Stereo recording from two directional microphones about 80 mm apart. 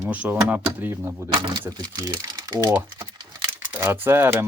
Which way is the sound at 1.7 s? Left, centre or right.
Right.